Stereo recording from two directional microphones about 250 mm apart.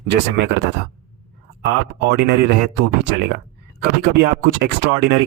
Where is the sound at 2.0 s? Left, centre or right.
Right.